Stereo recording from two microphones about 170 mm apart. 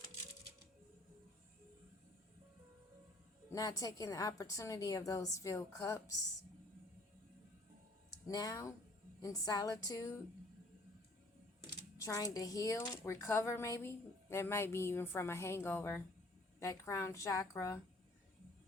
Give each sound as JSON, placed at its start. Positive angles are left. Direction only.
{"t": 3.5, "sound": "a woman's voice", "side_deg": 20}
{"t": 8.3, "sound": "a woman's voice", "side_deg": 20}
{"t": 11.9, "sound": "a woman's voice", "side_deg": 20}